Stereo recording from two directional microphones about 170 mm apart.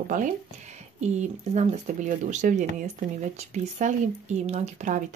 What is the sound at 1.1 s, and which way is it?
Speech, 40° right (ahead or behind).